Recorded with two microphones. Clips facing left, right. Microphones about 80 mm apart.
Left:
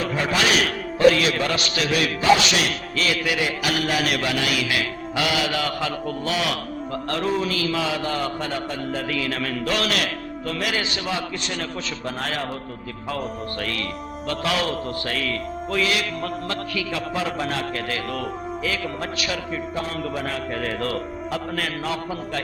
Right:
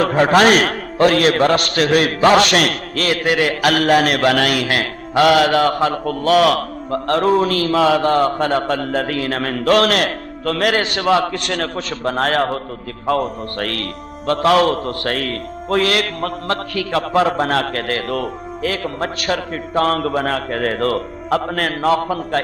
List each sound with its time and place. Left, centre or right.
0.0 s a man's voice: right